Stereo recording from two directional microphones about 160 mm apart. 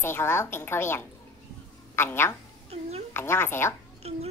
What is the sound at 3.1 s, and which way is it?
Speech, 15° left (ahead or behind).